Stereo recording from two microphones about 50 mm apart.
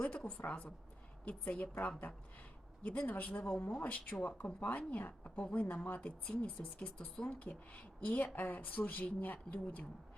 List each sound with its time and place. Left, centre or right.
0.3 s speech: left
2.8 s speech: left